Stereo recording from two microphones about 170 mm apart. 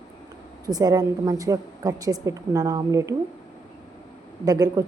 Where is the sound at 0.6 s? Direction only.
20° right (ahead or behind).